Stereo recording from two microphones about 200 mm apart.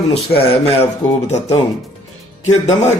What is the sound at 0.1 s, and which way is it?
Speech, 30° left (ahead or behind).